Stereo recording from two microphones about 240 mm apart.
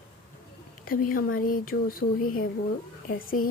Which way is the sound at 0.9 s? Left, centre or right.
Left.